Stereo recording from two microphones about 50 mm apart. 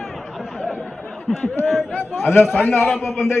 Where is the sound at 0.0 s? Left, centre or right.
Centre.